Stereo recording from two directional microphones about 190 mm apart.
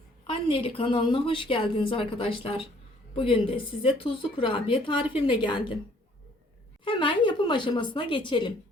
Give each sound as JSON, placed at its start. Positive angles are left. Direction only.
{"t": 0.3, "sound": "a woman's voice", "side_deg": 30}
{"t": 6.8, "sound": "a woman's voice", "side_deg": 25}